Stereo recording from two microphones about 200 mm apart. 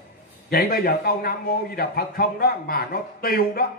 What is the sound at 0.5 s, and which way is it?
A man's voice, 50° left (ahead or behind).